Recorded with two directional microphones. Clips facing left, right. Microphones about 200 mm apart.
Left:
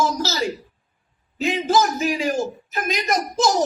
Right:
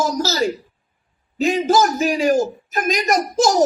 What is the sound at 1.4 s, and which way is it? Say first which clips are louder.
A woman's voice: right 3 dB; 45° right (ahead or behind).